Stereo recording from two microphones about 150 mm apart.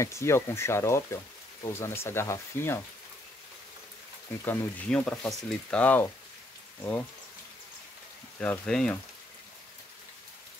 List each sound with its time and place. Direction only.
0.0 s speech: 20° left (ahead or behind)
4.5 s speech: 10° left (ahead or behind)
8.4 s speech: 5° left (ahead or behind)